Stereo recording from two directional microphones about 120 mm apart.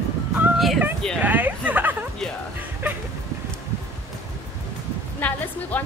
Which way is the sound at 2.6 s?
15° right (ahead or behind).